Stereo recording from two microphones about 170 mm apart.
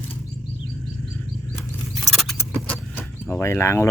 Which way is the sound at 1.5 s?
Centre (ahead or behind).